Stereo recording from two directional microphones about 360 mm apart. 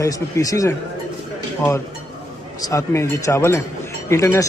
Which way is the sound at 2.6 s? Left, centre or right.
Centre.